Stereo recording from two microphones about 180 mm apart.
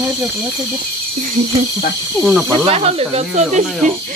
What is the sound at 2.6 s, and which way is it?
Speech, 35° right (ahead or behind).